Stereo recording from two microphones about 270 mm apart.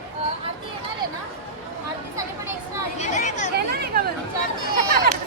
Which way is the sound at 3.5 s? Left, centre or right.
Right.